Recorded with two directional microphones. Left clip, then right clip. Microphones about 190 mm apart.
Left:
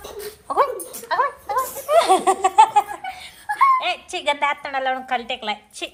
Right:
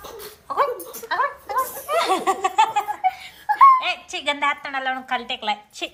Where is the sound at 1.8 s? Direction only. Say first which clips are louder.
Left 7 dB; 5° right (ahead or behind).